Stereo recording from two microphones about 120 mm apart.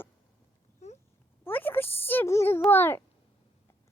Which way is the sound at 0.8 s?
70° left (ahead or behind).